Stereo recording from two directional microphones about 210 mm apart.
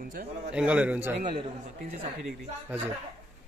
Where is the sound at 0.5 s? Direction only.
5° right (ahead or behind).